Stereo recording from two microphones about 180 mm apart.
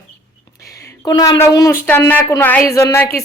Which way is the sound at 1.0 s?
20° left (ahead or behind).